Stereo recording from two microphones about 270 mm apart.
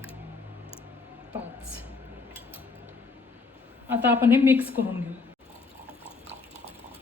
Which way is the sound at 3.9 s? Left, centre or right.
Centre.